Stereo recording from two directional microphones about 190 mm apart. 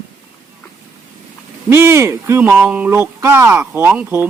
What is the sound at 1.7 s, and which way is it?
Speech, 15° right (ahead or behind).